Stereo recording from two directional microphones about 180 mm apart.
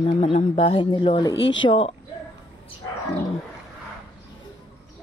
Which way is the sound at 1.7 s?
30° left (ahead or behind).